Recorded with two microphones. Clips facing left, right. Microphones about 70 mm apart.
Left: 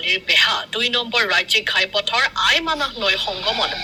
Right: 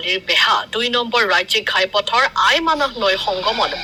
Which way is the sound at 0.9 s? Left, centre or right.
Right.